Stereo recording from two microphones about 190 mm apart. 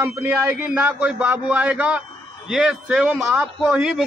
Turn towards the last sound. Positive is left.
turn(degrees=-5)  # may be behind; listen again after turning